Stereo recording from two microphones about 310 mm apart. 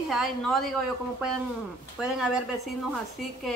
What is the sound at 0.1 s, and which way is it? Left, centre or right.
Speech, centre.